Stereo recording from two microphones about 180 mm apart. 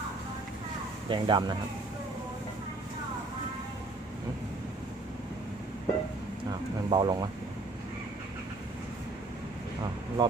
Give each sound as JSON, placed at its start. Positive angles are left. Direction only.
{"t": 1.1, "sound": "speech", "side_deg": -25}
{"t": 6.9, "sound": "speech", "side_deg": -25}
{"t": 10.2, "sound": "speech", "side_deg": -25}